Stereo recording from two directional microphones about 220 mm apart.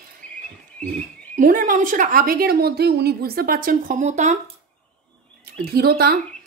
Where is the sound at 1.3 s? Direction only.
35° right (ahead or behind).